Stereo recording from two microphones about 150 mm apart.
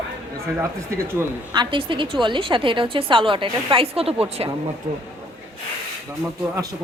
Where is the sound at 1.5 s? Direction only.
30° right (ahead or behind).